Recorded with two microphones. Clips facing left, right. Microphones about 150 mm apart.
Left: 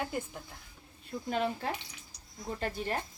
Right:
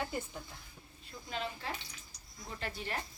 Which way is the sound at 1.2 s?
50° left (ahead or behind).